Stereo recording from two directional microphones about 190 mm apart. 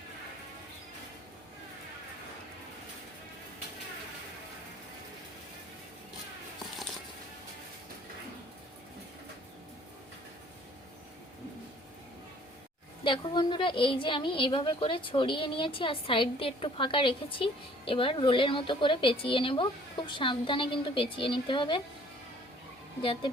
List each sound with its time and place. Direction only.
13.1 s a woman's voice: 25° left (ahead or behind)